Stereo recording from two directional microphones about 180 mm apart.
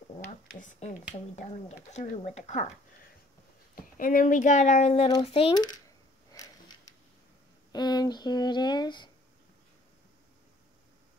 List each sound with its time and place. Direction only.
0.3 s speech: 40° left (ahead or behind)
3.7 s speech: 50° left (ahead or behind); by 5.8 s 25° left (ahead or behind)
6.3 s a sound: 20° left (ahead or behind)
7.7 s speech: 25° left (ahead or behind)